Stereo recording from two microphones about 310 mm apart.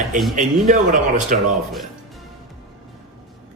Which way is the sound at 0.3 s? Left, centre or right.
Right.